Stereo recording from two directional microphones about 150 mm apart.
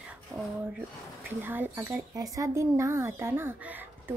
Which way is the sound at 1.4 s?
15° right (ahead or behind).